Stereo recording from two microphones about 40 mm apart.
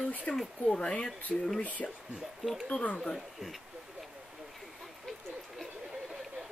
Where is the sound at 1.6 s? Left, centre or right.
Left.